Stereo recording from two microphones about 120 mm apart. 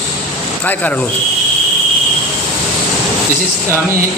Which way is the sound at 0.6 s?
15° left (ahead or behind).